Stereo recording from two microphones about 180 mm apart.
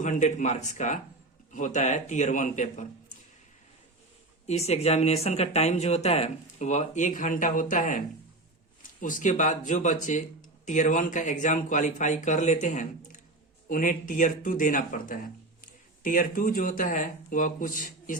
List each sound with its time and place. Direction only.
0.0 s speech: 40° left (ahead or behind)
4.4 s speech: 35° left (ahead or behind)